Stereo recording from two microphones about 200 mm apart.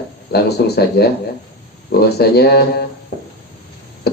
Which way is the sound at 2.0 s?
55° left (ahead or behind).